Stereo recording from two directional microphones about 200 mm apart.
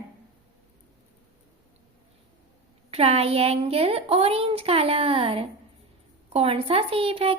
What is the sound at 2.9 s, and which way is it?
A woman's voice, 30° right (ahead or behind).